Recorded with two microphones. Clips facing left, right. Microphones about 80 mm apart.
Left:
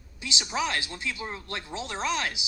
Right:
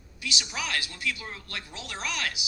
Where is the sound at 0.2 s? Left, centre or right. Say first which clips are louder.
Left 4 dB; left.